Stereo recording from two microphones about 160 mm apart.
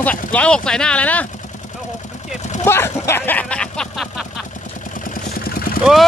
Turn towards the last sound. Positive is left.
turn(degrees=0)  # may be behind; listen again after turning